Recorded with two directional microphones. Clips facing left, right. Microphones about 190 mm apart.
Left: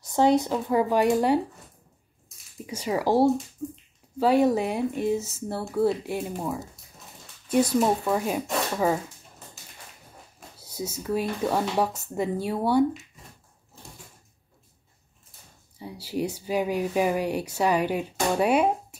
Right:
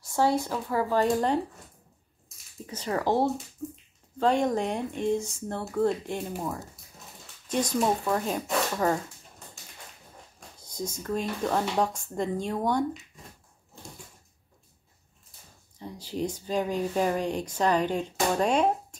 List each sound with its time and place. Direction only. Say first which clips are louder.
0.0 s speech: left 4 dB; 20° left (ahead or behind)
2.6 s speech: left 2 dB; 10° left (ahead or behind)
3.6 s speech: left 3 dB; centre (ahead or behind)
7.4 s speech: left 4 dB; 10° left (ahead or behind)
9.6 s a sound: even; 5° left (ahead or behind)
10.6 s speech: left 1 dB; 5° left (ahead or behind)
15.8 s speech: left 2 dB; 10° left (ahead or behind)